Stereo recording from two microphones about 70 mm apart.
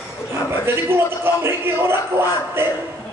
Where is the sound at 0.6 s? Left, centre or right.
Right.